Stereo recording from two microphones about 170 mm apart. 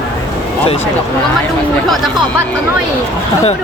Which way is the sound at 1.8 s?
Centre (ahead or behind).